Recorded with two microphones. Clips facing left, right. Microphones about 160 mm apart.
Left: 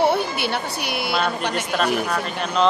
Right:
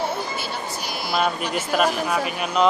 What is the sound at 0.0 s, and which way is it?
Speech, 70° left (ahead or behind).